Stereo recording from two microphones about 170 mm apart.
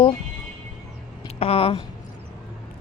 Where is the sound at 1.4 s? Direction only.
35° left (ahead or behind).